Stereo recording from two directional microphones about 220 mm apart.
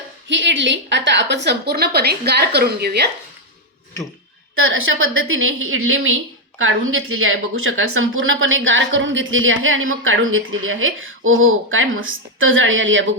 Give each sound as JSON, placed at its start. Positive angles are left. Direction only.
{"t": 0.3, "sound": "a woman's voice", "side_deg": -55}
{"t": 4.5, "sound": "a woman's voice", "side_deg": -65}